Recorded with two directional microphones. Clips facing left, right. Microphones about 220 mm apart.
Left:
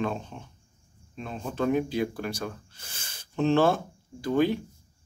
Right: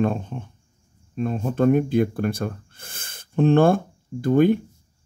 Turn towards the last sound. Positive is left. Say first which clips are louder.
# right 7 dB
turn(degrees=-55)  # may be behind; listen again after turning